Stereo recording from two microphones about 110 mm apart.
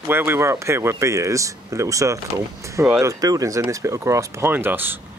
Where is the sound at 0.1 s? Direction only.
20° right (ahead or behind).